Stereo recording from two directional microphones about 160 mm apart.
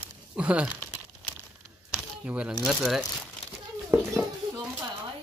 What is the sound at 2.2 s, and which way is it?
Speech, 5° right (ahead or behind).